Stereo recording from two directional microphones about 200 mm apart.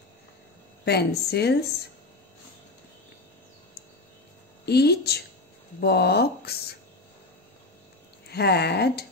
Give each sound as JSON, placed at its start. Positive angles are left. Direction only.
{"t": 0.8, "sound": "a woman's voice", "side_deg": 55}
{"t": 4.6, "sound": "speech", "side_deg": 55}
{"t": 8.3, "sound": "a woman's voice", "side_deg": 55}